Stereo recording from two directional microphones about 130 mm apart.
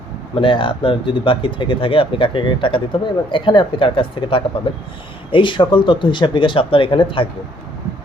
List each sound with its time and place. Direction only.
0.3 s speech: 40° left (ahead or behind)